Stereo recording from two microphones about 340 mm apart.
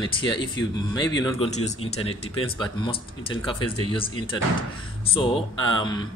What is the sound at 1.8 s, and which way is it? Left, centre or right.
Speech, left.